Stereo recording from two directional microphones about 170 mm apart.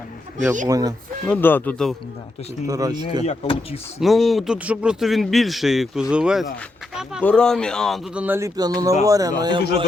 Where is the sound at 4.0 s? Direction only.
Centre (ahead or behind).